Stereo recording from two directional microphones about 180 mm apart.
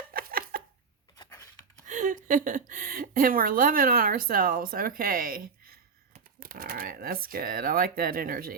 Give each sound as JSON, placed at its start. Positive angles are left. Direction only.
{"t": 0.1, "sound": "a sound", "side_deg": -55}
{"t": 1.2, "sound": "scissors", "side_deg": 20}
{"t": 1.9, "sound": "a woman's voice", "side_deg": -45}